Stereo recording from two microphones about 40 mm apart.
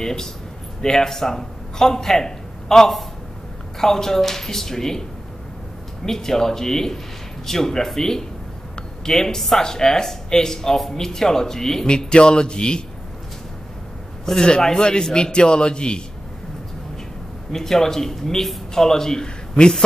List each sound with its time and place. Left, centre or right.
0.0 s a man's voice: centre
6.0 s speech: centre
11.9 s a man's voice: left
14.2 s a man's voice: centre
17.5 s speech: centre